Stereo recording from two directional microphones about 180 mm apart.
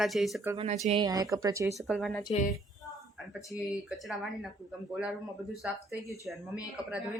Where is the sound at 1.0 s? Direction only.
20° right (ahead or behind).